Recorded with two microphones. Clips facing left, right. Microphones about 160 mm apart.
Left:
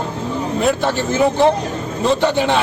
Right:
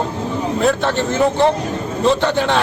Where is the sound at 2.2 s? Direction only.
5° left (ahead or behind).